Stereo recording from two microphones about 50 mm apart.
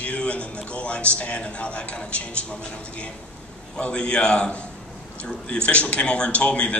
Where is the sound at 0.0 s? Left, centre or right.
Left.